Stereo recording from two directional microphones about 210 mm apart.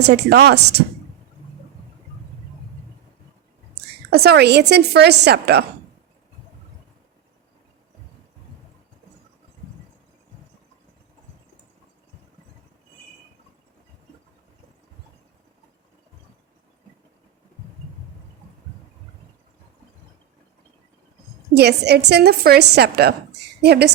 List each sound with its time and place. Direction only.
0.0 s a woman's voice: 50° right (ahead or behind)
4.1 s a woman's voice: 50° right (ahead or behind)
21.5 s a woman's voice: 50° right (ahead or behind)